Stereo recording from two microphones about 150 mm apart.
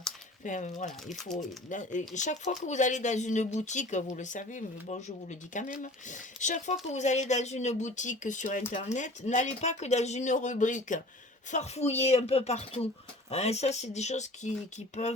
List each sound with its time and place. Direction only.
0.4 s speech: 55° left (ahead or behind)
1.0 s speech: centre (ahead or behind)
1.7 s speech: 55° left (ahead or behind)
11.5 s speech: 45° left (ahead or behind)